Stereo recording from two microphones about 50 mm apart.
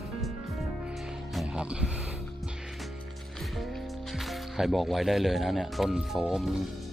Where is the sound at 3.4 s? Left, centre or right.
Centre.